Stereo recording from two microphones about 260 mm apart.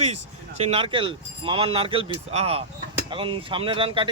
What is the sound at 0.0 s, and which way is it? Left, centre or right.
Speech, right.